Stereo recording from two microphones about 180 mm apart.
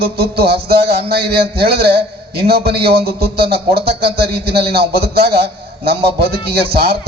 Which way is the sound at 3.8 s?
60° right (ahead or behind).